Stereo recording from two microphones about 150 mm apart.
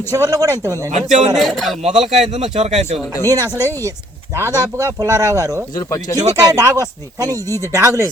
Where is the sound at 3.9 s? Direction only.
15° right (ahead or behind).